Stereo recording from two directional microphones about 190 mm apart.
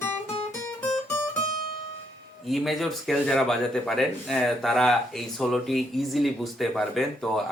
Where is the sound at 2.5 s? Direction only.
Centre (ahead or behind).